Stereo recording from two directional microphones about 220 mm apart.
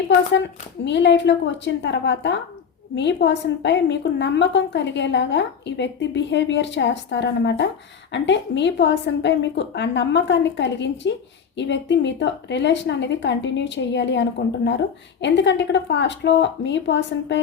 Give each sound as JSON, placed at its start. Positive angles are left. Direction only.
{"t": 0.3, "sound": "a woman's voice", "side_deg": 55}